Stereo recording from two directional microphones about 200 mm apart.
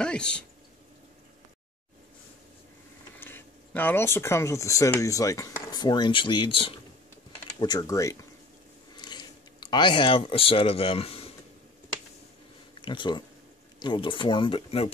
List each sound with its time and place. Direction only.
0.0 s speech: 5° left (ahead or behind)
3.2 s speech: 10° left (ahead or behind)
8.9 s a sound: 20° left (ahead or behind)
12.8 s speech: 25° left (ahead or behind)